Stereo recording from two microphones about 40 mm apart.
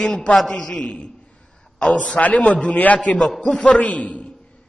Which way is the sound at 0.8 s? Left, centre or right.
Left.